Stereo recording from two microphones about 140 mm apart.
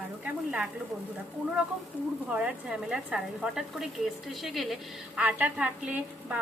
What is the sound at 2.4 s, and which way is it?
Speech, 5° right (ahead or behind).